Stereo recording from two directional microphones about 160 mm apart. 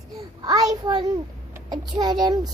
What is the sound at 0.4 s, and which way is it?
A child's voice, 25° right (ahead or behind).